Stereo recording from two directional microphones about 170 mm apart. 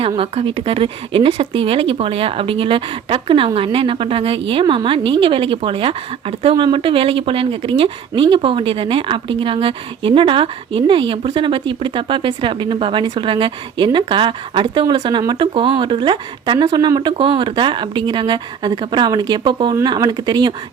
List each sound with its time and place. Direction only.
0.2 s a woman's voice: 35° right (ahead or behind)